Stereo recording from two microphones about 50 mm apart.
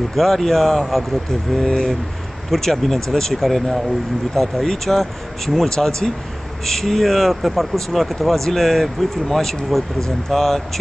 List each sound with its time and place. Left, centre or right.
0.1 s speech: centre